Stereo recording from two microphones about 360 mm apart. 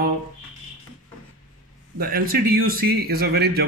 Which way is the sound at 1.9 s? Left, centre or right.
Right.